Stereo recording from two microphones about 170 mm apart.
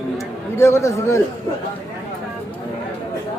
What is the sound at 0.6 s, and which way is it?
Speech, 15° left (ahead or behind).